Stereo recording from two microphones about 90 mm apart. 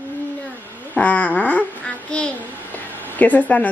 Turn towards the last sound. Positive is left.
turn(degrees=15)  # may be behind; listen again after turning